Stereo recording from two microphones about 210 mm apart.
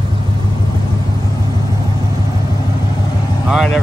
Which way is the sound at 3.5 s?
Centre (ahead or behind).